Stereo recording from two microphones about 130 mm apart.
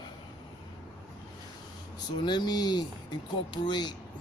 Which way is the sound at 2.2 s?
35° left (ahead or behind).